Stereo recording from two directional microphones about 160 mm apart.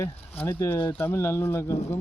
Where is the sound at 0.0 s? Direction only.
15° left (ahead or behind).